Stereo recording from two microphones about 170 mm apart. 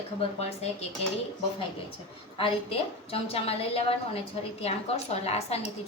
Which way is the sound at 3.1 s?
35° left (ahead or behind).